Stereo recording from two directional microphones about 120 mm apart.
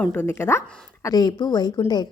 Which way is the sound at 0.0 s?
15° left (ahead or behind).